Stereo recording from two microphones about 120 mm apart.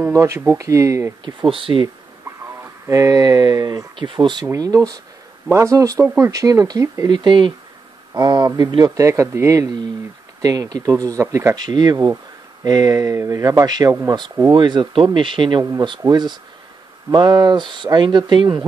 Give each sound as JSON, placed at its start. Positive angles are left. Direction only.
{"t": 0.0, "sound": "speech", "side_deg": -25}
{"t": 1.2, "sound": "speech", "side_deg": -45}
{"t": 2.9, "sound": "speech", "side_deg": -30}
{"t": 3.9, "sound": "speech", "side_deg": -45}
{"t": 7.1, "sound": "speech", "side_deg": -40}